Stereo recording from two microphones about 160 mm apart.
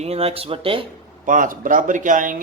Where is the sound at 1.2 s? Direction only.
55° right (ahead or behind).